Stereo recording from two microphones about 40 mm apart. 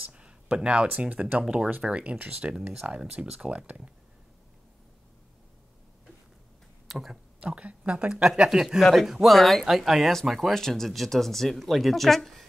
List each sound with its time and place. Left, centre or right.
0.1 s a sound: right
0.8 s speech: right
1.5 s speech: right
2.5 s speech: centre
3.4 s speech: right
6.9 s speech: centre
7.3 s speech: right
8.1 s speech: centre
10.5 s speech: centre